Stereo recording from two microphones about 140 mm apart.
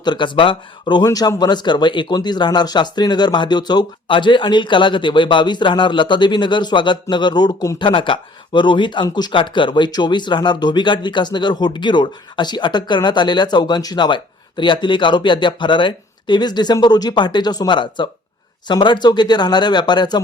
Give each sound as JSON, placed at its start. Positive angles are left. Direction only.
{"t": 0.0, "sound": "speech", "side_deg": 35}